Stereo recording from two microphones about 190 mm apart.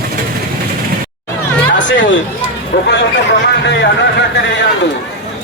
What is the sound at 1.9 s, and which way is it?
Chatter, 75° left (ahead or behind).